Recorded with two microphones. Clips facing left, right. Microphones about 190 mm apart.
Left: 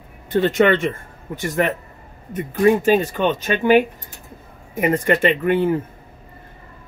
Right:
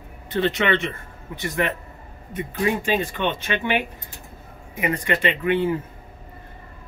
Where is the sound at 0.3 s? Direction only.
45° left (ahead or behind).